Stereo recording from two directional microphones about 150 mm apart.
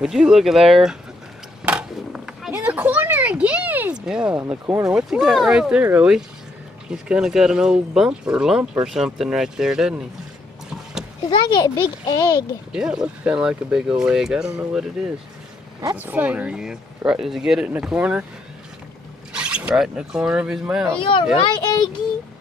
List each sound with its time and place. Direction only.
0.0 s speech: 5° right (ahead or behind)
1.6 s skateboard: 5° right (ahead or behind)
2.5 s a sound: 10° right (ahead or behind)
4.6 s speech: 20° right (ahead or behind)
4.9 s speech: 5° right (ahead or behind)
11.2 s a child's voice: 30° left (ahead or behind)
12.7 s speech: 5° right (ahead or behind)
16.0 s speech: 10° right (ahead or behind)
19.3 s speech: 5° right (ahead or behind)
21.0 s a child's voice: 35° left (ahead or behind)